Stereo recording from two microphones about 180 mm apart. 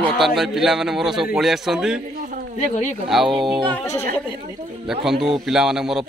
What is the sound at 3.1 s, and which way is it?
Speech, centre (ahead or behind).